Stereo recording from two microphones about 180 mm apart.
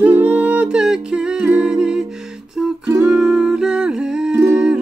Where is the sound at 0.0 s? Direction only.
10° right (ahead or behind).